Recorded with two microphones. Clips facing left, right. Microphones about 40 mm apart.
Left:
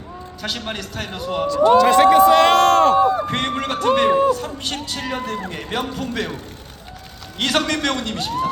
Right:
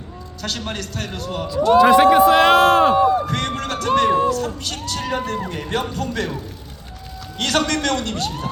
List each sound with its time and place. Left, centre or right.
0.4 s a man's voice: centre
1.8 s speech: centre
3.2 s a man's voice: left
7.3 s a man's voice: centre